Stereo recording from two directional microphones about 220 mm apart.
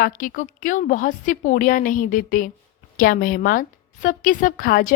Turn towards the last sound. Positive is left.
turn(degrees=40)  # may be behind; listen again after turning